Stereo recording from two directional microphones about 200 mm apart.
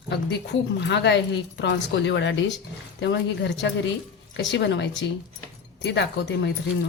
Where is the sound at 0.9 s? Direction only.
60° left (ahead or behind).